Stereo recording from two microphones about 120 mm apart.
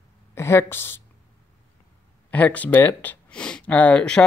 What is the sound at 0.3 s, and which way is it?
Speech, 20° left (ahead or behind).